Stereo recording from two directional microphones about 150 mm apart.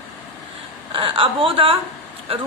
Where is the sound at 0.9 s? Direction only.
35° right (ahead or behind).